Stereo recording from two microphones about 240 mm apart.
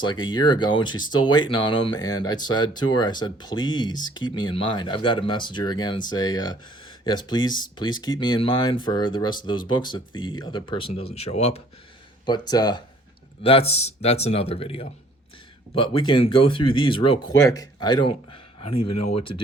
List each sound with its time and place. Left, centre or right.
0.0 s speech: centre